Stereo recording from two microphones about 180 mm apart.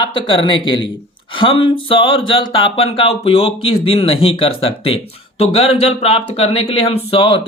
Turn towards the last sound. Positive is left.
turn(degrees=30)  # may be behind; listen again after turning